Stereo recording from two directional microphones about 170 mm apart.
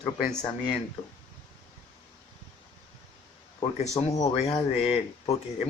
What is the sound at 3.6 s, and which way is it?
Speech, 30° left (ahead or behind).